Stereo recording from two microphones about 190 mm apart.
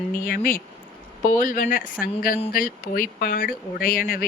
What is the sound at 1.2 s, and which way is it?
Speech, 45° left (ahead or behind).